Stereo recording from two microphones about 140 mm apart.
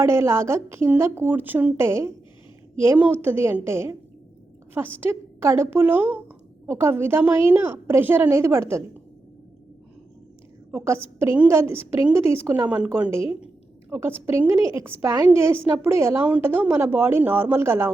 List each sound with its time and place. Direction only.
0.0 s a woman's voice: 20° right (ahead or behind)
10.7 s a woman's voice: 15° right (ahead or behind)
13.1 s a woman's voice: 40° left (ahead or behind)
13.9 s a woman's voice: 15° right (ahead or behind)